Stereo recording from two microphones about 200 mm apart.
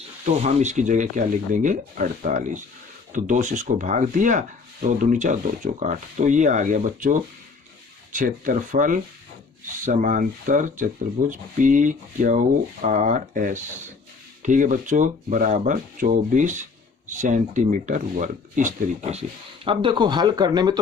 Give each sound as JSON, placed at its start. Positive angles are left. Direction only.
{"t": 0.3, "sound": "speech", "side_deg": -35}